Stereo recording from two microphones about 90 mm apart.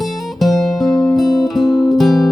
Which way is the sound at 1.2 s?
45° left (ahead or behind).